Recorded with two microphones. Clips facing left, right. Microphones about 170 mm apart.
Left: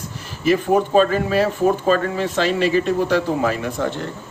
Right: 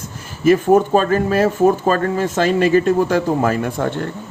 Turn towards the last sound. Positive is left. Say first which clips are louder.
# right 3 dB
turn(degrees=-50)  # may be behind; listen again after turning